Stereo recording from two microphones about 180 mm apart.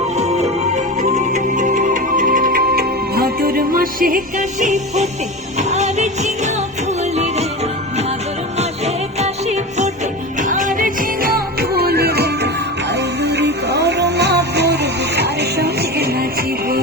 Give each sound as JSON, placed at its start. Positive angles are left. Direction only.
{"t": 0.2, "sound": "music", "side_deg": -35}
{"t": 9.1, "sound": "music", "side_deg": -40}